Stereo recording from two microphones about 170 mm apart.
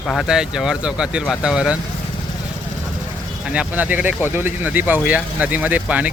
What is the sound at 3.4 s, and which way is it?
Speech, 5° right (ahead or behind).